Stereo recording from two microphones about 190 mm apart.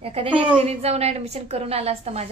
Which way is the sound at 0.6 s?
35° right (ahead or behind).